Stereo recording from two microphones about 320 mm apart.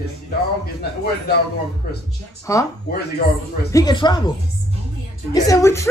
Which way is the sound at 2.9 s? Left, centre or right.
Left.